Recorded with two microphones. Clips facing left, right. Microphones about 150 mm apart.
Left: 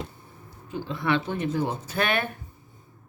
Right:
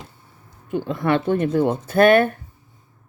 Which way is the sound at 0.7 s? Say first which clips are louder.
Right 6 dB; 55° right (ahead or behind).